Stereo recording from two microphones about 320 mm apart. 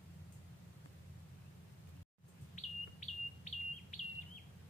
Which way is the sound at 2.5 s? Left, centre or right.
Left.